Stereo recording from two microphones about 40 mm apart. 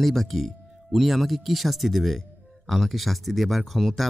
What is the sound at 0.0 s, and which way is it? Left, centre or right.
Speech, centre.